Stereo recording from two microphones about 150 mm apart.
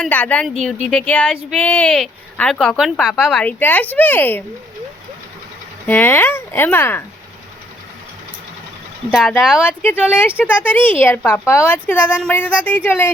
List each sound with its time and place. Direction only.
0.0 s a woman's voice: 10° left (ahead or behind)
5.8 s a woman's voice: 15° left (ahead or behind)
9.0 s speech: 5° right (ahead or behind)
9.6 s a woman's voice: 10° left (ahead or behind)